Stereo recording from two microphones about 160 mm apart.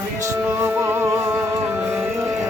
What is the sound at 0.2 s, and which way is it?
Music, 15° right (ahead or behind).